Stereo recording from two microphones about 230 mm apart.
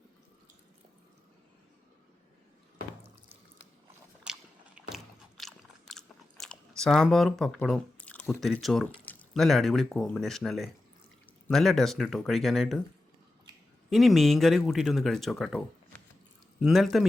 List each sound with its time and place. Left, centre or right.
4.2 s a sound: centre
5.4 s biting: centre
11.4 s speech: centre
13.9 s speech: centre